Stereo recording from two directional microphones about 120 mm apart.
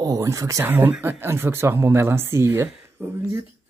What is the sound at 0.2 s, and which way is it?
Speech, 25° right (ahead or behind).